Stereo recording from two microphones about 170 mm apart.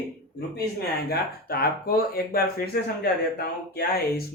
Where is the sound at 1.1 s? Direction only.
65° left (ahead or behind).